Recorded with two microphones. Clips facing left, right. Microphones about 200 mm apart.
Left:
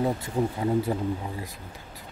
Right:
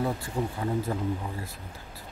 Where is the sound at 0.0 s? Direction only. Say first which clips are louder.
Left 4 dB; 20° left (ahead or behind).